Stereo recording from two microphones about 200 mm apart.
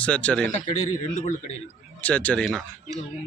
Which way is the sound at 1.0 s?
40° left (ahead or behind).